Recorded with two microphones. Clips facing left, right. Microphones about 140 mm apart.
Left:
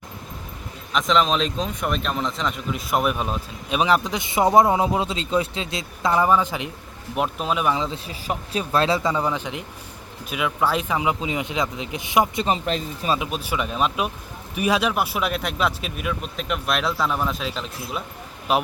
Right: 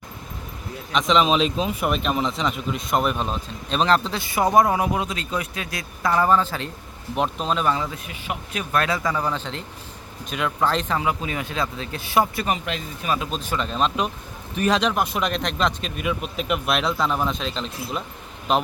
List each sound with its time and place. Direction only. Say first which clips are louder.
0.9 s a man's voice: right 1 dB; centre (ahead or behind); by 6.1 s 20° left (ahead or behind)
6.1 s a man's voice: even; 10° left (ahead or behind)
8.0 s a man's voice: left 3 dB; 30° left (ahead or behind)
9.2 s a man's voice: left 1 dB; 15° left (ahead or behind)
12.5 s speech: left 3 dB; 30° left (ahead or behind)
13.1 s a man's voice: even; 10° left (ahead or behind)